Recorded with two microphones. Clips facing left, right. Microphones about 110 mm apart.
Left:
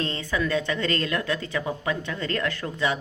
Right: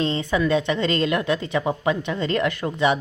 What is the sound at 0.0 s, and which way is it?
A woman's voice, 20° right (ahead or behind).